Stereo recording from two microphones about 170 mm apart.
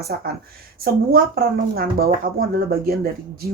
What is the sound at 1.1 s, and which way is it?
Speech, 60° right (ahead or behind).